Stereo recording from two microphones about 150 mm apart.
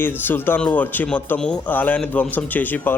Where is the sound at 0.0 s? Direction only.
15° left (ahead or behind).